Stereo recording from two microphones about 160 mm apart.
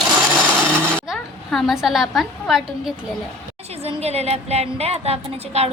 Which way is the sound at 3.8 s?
40° right (ahead or behind).